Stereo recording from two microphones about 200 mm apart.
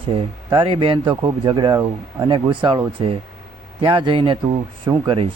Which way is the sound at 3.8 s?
25° right (ahead or behind).